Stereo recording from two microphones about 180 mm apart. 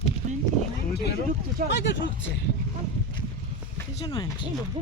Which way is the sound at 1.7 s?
70° left (ahead or behind).